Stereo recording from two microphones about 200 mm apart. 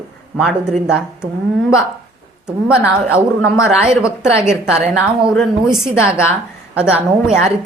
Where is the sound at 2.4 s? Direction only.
5° right (ahead or behind).